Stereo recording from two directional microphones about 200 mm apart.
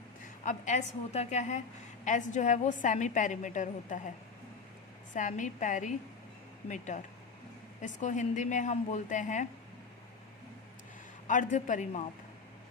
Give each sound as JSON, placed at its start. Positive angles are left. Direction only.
{"t": 0.4, "sound": "a woman's voice", "side_deg": 35}
{"t": 5.1, "sound": "a woman's voice", "side_deg": 40}
{"t": 11.3, "sound": "a woman's voice", "side_deg": 40}